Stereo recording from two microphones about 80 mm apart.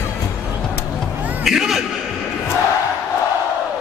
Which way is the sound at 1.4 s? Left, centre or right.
Centre.